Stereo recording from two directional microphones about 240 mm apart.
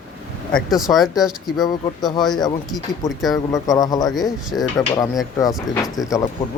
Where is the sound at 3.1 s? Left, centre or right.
Centre.